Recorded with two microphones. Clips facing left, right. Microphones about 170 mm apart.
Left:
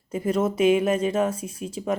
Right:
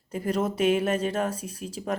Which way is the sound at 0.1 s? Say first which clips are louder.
Left 3 dB; 35° right (ahead or behind).